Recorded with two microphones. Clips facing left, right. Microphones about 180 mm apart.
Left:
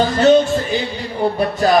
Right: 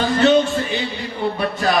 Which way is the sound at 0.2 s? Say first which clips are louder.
Left 3 dB; 40° left (ahead or behind).